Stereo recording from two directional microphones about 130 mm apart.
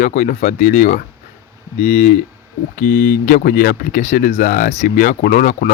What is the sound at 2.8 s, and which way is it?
Speech, 90° left.